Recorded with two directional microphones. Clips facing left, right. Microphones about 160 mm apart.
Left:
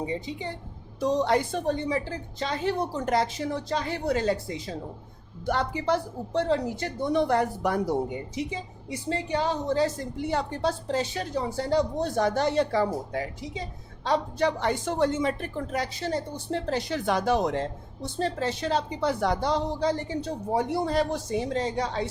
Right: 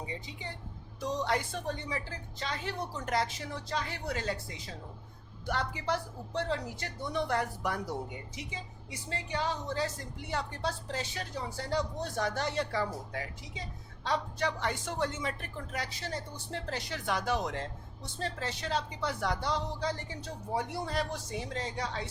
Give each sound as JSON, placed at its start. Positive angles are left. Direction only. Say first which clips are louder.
{"t": 0.0, "sound": "speech", "louder": "left 10 dB", "side_deg": 30}
{"t": 9.0, "sound": "speech", "louder": "left 7 dB", "side_deg": 30}